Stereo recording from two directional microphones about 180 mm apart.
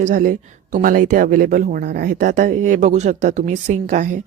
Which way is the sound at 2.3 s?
45° right (ahead or behind).